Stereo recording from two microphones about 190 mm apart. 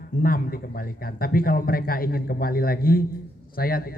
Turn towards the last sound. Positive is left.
turn(degrees=50)  # may be behind; listen again after turning